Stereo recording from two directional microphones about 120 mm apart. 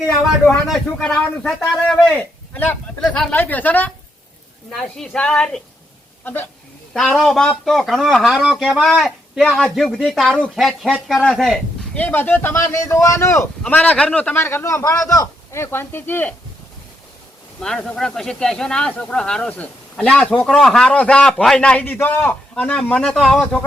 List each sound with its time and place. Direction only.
0.7 s speech: 5° left (ahead or behind)
4.7 s speech: 5° left (ahead or behind)
6.9 s speech: 5° left (ahead or behind)
11.9 s a man's voice: 15° left (ahead or behind)
13.6 s a man's voice: 10° left (ahead or behind)
17.6 s speech: 5° left (ahead or behind)